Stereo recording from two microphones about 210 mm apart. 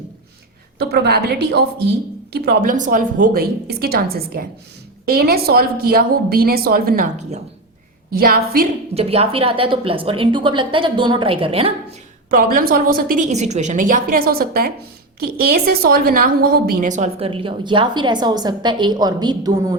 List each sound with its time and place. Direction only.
0.8 s a woman's voice: 50° right (ahead or behind)
2.8 s a woman's voice: 40° right (ahead or behind)
9.0 s a woman's voice: 30° right (ahead or behind)
12.3 s a woman's voice: 45° right (ahead or behind); by 19.7 s 20° right (ahead or behind)